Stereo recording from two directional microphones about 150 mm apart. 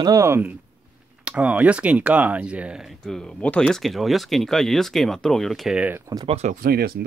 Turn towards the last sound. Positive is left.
turn(degrees=-90)